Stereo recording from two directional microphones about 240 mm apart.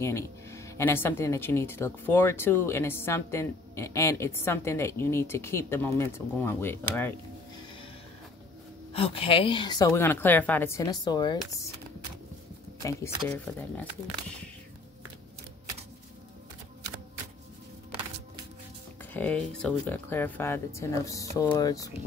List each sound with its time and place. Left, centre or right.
0.0 s speech: centre
8.9 s speech: left
12.8 s speech: centre
19.1 s speech: centre